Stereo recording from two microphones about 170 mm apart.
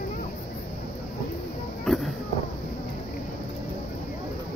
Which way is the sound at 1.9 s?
Centre (ahead or behind).